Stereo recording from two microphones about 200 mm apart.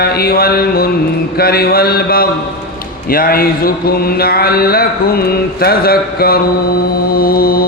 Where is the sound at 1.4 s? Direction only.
50° left (ahead or behind).